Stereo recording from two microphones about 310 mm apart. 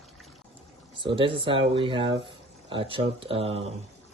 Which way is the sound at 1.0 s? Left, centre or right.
Centre.